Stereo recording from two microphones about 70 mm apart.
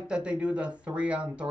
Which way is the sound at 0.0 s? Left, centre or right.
Centre.